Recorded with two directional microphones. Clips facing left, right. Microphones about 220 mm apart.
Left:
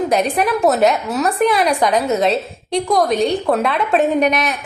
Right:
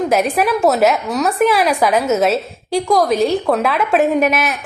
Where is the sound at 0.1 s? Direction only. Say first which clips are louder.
Right 1 dB; centre (ahead or behind).